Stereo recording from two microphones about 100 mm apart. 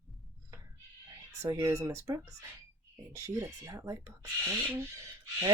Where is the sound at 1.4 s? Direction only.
35° right (ahead or behind).